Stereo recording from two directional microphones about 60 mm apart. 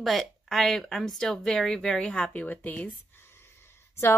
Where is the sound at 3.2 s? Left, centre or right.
Left.